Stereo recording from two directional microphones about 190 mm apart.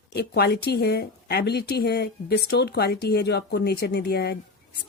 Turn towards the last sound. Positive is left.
turn(degrees=55)  # may be behind; listen again after turning